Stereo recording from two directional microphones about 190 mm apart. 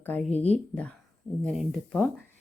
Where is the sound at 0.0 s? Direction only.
10° left (ahead or behind).